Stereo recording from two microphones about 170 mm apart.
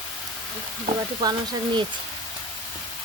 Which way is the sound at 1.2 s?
25° right (ahead or behind).